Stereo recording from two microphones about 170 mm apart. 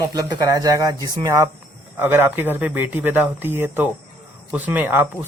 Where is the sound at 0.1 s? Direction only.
20° right (ahead or behind).